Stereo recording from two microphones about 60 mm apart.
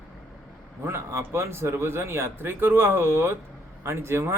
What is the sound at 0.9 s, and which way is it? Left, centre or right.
Speech, right.